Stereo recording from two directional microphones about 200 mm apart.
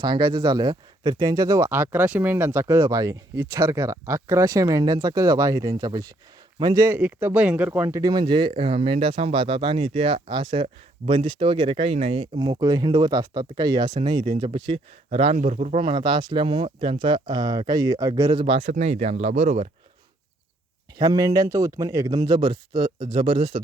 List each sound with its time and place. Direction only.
0.0 s speech: 20° right (ahead or behind)
21.0 s speech: 20° right (ahead or behind)